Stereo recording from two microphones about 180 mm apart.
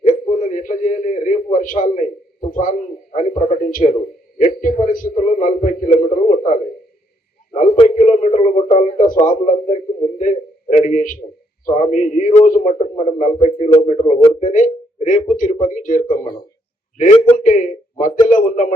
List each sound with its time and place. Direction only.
0.0 s a sound: 45° left (ahead or behind)
1.5 s a man's voice: 50° left (ahead or behind)
3.8 s a man's voice: 40° left (ahead or behind)
7.9 s a man's voice: 40° left (ahead or behind)